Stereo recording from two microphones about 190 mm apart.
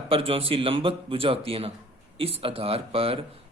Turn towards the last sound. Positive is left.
turn(degrees=-30)  # may be behind; listen again after turning